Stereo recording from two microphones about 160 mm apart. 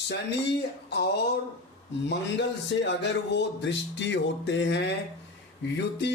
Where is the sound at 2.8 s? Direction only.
90° left.